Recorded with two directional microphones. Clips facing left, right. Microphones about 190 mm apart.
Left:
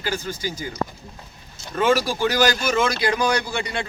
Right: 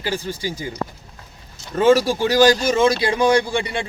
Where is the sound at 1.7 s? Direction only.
25° right (ahead or behind).